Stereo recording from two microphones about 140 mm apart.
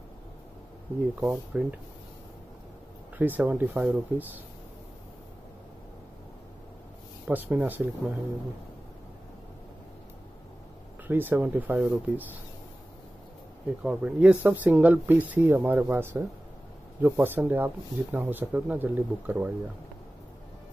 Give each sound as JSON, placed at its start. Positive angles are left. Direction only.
{"t": 1.2, "sound": "speech", "side_deg": -10}
{"t": 3.2, "sound": "speech", "side_deg": -10}
{"t": 7.2, "sound": "speech", "side_deg": -10}
{"t": 11.1, "sound": "speech", "side_deg": -15}
{"t": 13.8, "sound": "speech", "side_deg": -10}